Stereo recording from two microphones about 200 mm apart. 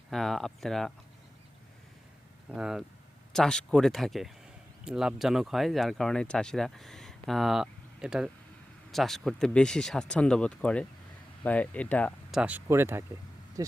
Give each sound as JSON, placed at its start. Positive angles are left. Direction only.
{"t": 0.1, "sound": "speech", "side_deg": 0}
{"t": 2.5, "sound": "speech", "side_deg": -5}
{"t": 12.4, "sound": "speech", "side_deg": -10}